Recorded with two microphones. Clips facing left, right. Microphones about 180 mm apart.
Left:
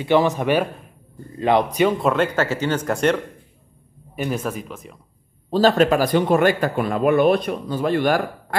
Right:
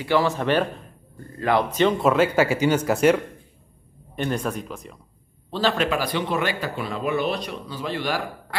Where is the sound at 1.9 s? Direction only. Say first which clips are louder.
Right 1 dB; centre (ahead or behind).